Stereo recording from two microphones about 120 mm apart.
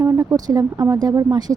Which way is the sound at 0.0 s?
25° right (ahead or behind).